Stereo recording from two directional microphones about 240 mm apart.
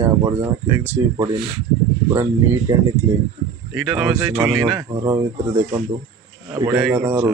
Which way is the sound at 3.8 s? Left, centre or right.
Centre.